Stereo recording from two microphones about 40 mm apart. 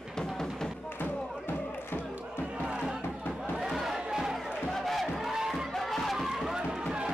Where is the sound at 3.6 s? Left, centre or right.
Centre.